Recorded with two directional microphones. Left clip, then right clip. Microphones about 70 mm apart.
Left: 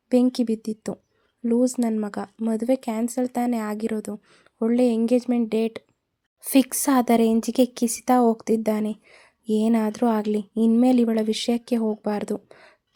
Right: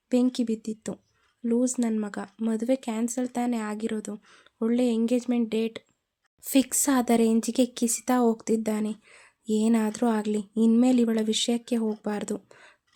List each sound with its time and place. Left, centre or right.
0.1 s a woman's voice: left
4.1 s speech: centre
4.6 s a woman's voice: left
6.7 s a woman's voice: left
9.0 s a woman's voice: centre